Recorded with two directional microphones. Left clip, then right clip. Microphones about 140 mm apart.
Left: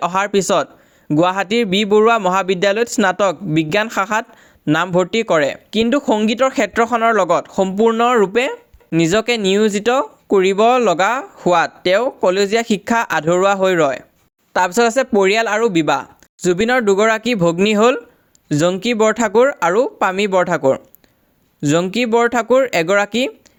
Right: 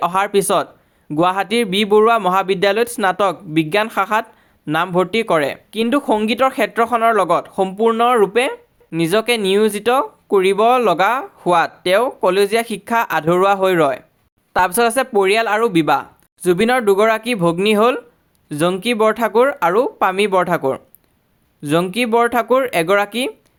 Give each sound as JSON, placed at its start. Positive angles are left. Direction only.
{"t": 0.0, "sound": "speech", "side_deg": 30}
{"t": 8.9, "sound": "speech", "side_deg": 25}